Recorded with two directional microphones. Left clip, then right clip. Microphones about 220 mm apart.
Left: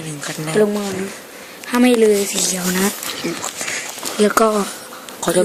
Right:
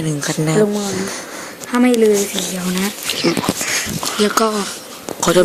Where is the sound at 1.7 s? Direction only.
40° left (ahead or behind).